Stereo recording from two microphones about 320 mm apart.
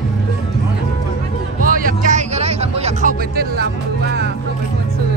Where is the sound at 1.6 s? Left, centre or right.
Right.